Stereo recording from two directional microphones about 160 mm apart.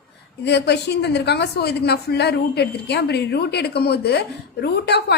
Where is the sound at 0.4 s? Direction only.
90° left.